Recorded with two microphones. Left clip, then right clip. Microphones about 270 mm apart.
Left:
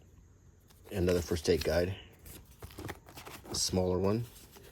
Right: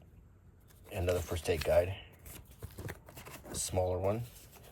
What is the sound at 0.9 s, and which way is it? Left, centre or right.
Speech, left.